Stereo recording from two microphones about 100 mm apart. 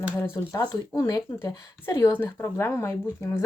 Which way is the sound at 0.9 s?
30° left (ahead or behind).